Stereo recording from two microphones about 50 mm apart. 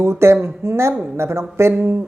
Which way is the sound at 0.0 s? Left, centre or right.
Right.